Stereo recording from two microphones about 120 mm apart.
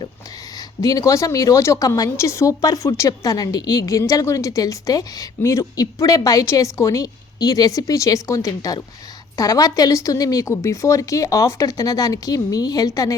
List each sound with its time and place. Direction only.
0.8 s speech: 30° left (ahead or behind)